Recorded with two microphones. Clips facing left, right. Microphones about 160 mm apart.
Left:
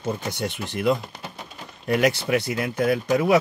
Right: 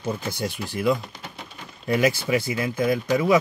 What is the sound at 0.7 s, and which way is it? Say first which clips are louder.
Speech: left 1 dB; 65° left (ahead or behind).